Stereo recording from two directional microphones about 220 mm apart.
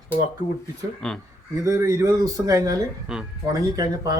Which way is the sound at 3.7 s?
20° right (ahead or behind).